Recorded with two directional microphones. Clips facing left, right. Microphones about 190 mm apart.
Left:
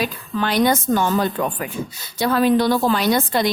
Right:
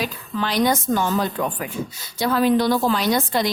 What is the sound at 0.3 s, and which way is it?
A woman's voice, 60° left (ahead or behind).